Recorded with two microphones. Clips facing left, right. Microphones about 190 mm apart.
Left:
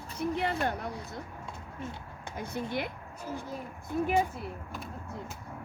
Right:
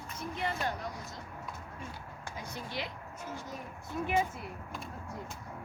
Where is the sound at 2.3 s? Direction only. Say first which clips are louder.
Left 7 dB; 55° left (ahead or behind).